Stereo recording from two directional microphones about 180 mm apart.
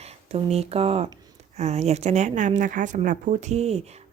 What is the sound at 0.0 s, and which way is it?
Speech, 35° right (ahead or behind).